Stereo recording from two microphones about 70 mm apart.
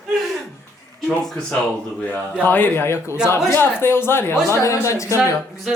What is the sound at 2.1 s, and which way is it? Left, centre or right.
A man's voice, left.